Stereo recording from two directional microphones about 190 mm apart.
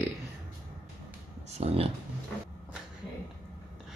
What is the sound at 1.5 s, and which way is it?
Speech, 35° right (ahead or behind).